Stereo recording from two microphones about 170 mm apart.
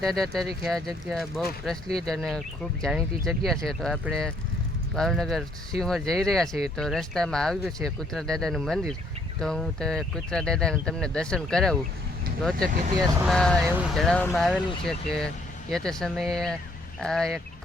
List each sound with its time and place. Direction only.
0.0 s speech: centre (ahead or behind)
12.6 s speech: 55° right (ahead or behind)
13.2 s speech: 5° left (ahead or behind)